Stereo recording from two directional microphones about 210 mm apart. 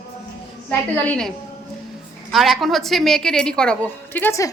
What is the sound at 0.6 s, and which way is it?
Speech, 5° left (ahead or behind).